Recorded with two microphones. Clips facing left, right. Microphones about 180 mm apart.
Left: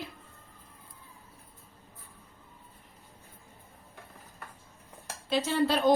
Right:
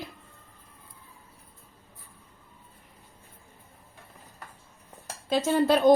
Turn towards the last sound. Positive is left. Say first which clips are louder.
# right 4 dB
turn(degrees=-45)  # may be behind; listen again after turning